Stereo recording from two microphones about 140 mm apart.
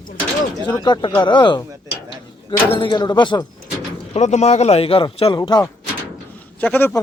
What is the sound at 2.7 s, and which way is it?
Speech, 35° left (ahead or behind).